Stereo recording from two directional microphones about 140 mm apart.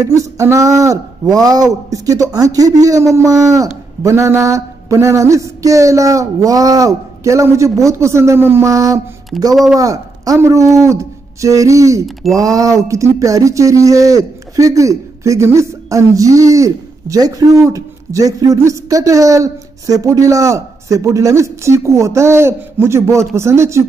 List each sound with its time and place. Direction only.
0.0 s a man's voice: 20° right (ahead or behind)
10.8 s a sound: 20° right (ahead or behind)
12.4 s speech: 25° right (ahead or behind)